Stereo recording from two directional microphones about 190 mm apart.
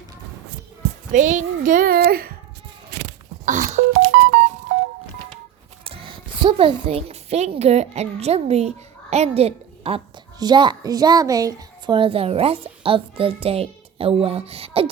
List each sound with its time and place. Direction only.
1.1 s a child's voice: 40° right (ahead or behind)
3.4 s telephone dialing: 40° right (ahead or behind)
4.1 s music: 55° right (ahead or behind)
5.8 s a woman's voice: 30° right (ahead or behind)